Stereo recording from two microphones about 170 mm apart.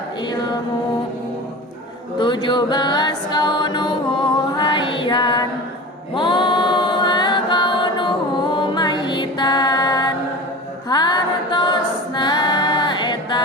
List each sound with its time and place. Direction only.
2.1 s music: 30° left (ahead or behind)
6.1 s mantra: 30° left (ahead or behind)
10.8 s music: 25° left (ahead or behind)